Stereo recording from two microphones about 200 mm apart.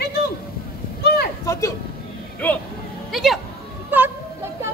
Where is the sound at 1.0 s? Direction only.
50° left (ahead or behind).